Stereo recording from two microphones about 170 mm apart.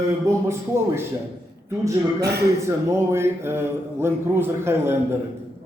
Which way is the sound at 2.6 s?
15° right (ahead or behind).